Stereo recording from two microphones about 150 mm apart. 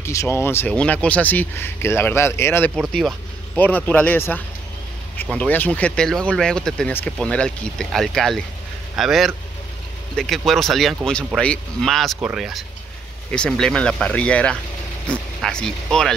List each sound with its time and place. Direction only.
0.0 s speech: 20° left (ahead or behind)
2.7 s speech: centre (ahead or behind)
3.5 s speech: 10° left (ahead or behind)